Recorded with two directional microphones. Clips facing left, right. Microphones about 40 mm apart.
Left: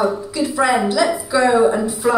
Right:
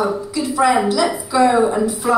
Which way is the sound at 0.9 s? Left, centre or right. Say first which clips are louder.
Even; centre.